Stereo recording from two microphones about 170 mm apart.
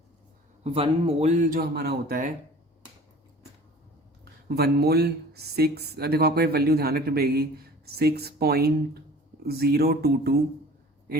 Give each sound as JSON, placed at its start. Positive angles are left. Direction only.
{"t": 0.6, "sound": "a man's voice", "side_deg": -35}
{"t": 4.4, "sound": "speech", "side_deg": -70}